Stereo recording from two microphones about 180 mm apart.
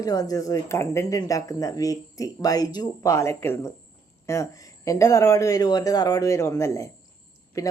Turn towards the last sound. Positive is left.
turn(degrees=20)  # may be behind; listen again after turning